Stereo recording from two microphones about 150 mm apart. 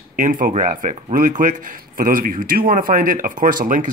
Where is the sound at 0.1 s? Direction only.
65° right (ahead or behind).